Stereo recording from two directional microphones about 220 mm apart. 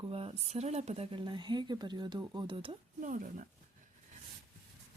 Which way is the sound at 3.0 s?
35° right (ahead or behind).